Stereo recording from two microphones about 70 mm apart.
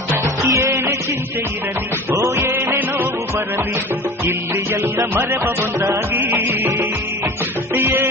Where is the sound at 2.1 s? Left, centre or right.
Right.